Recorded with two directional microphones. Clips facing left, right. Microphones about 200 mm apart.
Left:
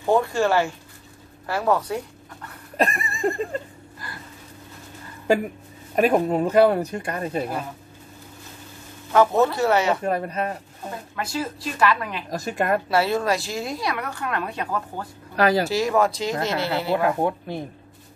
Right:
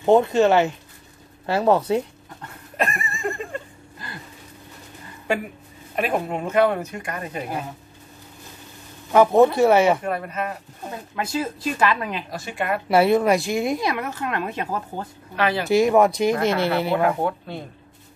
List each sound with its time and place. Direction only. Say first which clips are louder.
0.0 s speech: right 4 dB; 20° right (ahead or behind)
2.8 s a sound: left 3 dB; 35° left (ahead or behind)
5.9 s speech: left 5 dB; 40° left (ahead or behind)
9.1 s speech: right 3 dB; 15° right (ahead or behind)
10.0 s speech: left 2 dB; 35° left (ahead or behind)
11.1 s speech: right 3 dB; 20° right (ahead or behind)
12.3 s speech: left 6 dB; 40° left (ahead or behind)
12.8 s speech: right 5 dB; 20° right (ahead or behind)
15.3 s speech: left 3 dB; 35° left (ahead or behind)
15.7 s speech: right 5 dB; 20° right (ahead or behind)
16.3 s speech: right 4 dB; 20° left (ahead or behind)
16.8 s speech: right 1 dB; 20° right (ahead or behind)